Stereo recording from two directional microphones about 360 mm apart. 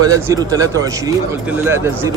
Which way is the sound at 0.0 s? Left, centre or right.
Centre.